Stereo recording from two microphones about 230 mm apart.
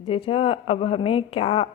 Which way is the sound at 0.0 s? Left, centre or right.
Left.